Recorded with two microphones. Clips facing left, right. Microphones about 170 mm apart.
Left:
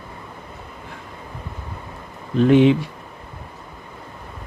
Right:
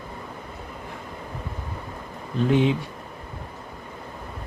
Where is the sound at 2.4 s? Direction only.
75° left (ahead or behind).